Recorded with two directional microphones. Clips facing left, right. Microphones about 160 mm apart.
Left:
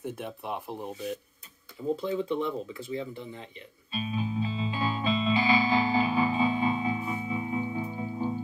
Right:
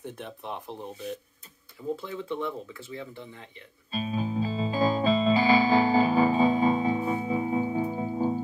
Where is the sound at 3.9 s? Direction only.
40° right (ahead or behind).